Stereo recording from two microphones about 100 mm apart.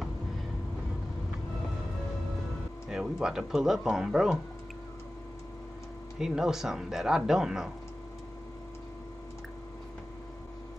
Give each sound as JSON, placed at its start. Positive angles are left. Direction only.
{"t": 2.9, "sound": "speech", "side_deg": -5}
{"t": 6.1, "sound": "speech", "side_deg": -5}